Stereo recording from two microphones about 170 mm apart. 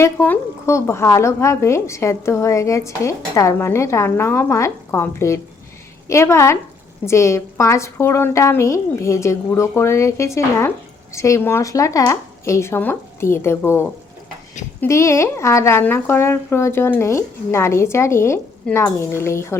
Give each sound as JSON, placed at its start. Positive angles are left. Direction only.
{"t": 0.0, "sound": "a woman's voice", "side_deg": 15}